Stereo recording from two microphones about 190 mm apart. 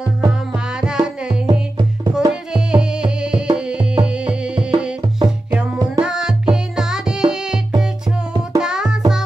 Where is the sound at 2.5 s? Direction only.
5° right (ahead or behind).